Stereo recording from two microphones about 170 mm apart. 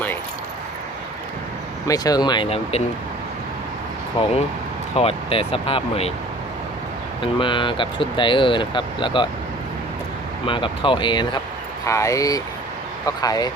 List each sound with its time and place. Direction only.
1.9 s speech: 20° left (ahead or behind)
4.2 s speech: 40° left (ahead or behind)
7.2 s speech: 30° left (ahead or behind)
10.4 s speech: 30° left (ahead or behind)
11.9 s speech: 20° left (ahead or behind)